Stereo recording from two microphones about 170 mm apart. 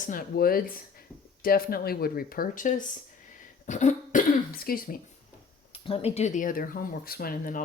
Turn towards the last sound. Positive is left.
turn(degrees=55)  # may be behind; listen again after turning